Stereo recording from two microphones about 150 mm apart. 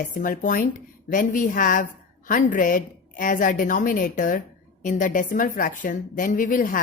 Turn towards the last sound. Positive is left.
turn(degrees=65)  # may be behind; listen again after turning